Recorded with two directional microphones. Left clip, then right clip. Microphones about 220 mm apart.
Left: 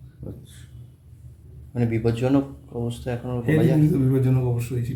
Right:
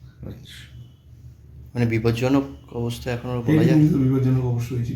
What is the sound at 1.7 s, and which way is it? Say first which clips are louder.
Speech: right 2 dB; 10° left (ahead or behind).